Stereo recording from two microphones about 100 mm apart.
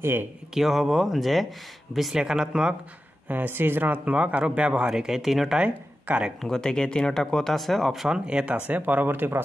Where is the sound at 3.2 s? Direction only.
20° right (ahead or behind).